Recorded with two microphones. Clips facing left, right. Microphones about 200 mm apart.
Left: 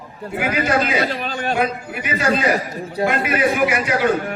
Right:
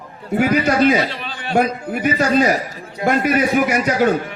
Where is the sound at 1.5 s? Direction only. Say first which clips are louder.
Right 6 dB; 45° right (ahead or behind).